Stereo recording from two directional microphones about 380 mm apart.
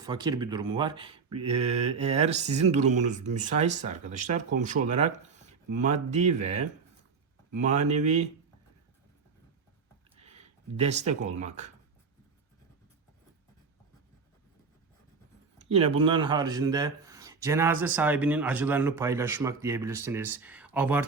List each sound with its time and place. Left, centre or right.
0.0 s speech: centre
10.2 s speech: centre
15.7 s speech: centre